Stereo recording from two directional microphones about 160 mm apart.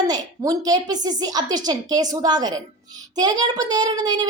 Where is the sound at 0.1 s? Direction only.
25° right (ahead or behind).